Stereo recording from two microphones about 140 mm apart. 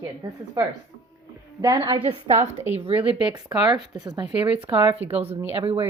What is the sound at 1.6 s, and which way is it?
Speech, 25° right (ahead or behind).